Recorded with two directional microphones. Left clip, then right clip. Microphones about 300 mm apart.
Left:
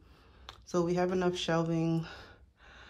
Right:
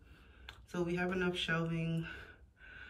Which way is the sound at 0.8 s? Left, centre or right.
Centre.